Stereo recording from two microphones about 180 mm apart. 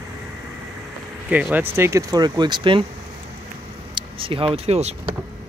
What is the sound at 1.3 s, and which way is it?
Speech, 10° right (ahead or behind).